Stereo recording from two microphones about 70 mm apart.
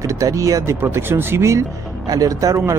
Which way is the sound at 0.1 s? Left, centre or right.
Right.